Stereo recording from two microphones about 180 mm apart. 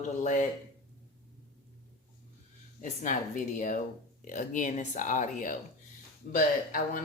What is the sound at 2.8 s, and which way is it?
Speech, 45° left (ahead or behind).